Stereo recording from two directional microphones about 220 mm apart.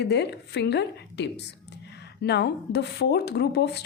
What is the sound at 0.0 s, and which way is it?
Speech, 50° left (ahead or behind).